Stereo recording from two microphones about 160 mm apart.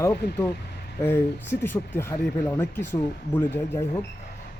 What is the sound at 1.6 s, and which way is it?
Speech, 15° left (ahead or behind).